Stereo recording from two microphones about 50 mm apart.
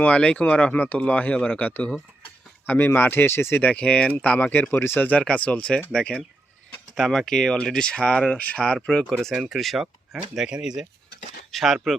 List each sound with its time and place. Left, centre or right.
0.0 s speech: left
0.7 s speech: left
2.6 s speech: left
3.6 s speech: left
4.7 s speech: left
4.9 s speech: left
5.2 s speech: left
8.4 s speech: left
8.6 s speech: centre
9.3 s speech: centre
9.8 s speech: centre
11.5 s speech: centre